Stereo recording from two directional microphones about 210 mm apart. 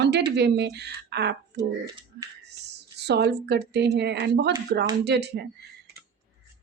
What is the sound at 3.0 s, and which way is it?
Speech, 50° right (ahead or behind).